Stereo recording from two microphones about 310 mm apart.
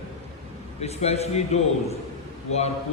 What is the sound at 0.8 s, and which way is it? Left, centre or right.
Mantra, centre.